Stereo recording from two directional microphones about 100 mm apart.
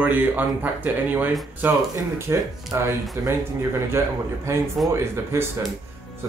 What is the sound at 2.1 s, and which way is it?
Speech, 30° right (ahead or behind).